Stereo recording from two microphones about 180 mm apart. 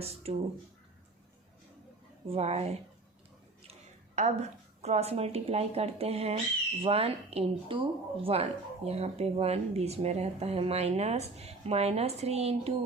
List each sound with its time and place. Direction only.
0.0 s speech: 35° right (ahead or behind)
2.2 s a woman's voice: 35° right (ahead or behind)